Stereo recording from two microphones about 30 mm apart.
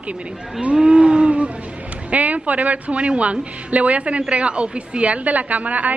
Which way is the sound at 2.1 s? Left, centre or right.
Right.